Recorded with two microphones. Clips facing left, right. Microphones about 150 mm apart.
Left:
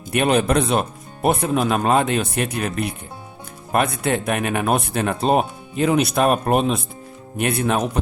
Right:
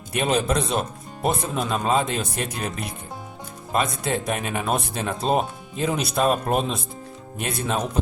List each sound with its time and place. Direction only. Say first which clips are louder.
0.1 s speech: left 5 dB; 65° left (ahead or behind)